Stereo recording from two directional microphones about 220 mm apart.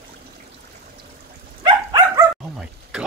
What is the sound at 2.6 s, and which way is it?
Speech, 5° right (ahead or behind).